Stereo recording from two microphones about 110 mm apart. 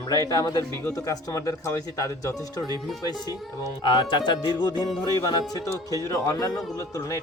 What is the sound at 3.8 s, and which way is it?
Speech, 50° left (ahead or behind).